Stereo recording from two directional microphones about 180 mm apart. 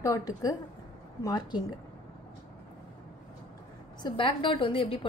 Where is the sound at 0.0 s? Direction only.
20° left (ahead or behind).